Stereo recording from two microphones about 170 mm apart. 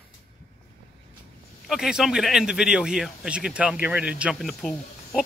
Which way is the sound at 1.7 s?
5° right (ahead or behind).